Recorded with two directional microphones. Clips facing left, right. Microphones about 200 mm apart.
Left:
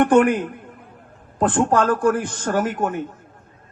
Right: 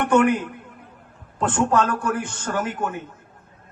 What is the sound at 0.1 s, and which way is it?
A man's voice, 35° left (ahead or behind).